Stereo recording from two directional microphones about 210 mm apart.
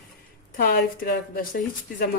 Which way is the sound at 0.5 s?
45° left (ahead or behind).